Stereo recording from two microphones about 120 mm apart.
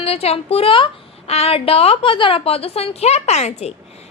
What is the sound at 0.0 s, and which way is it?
A woman's voice, 55° left (ahead or behind).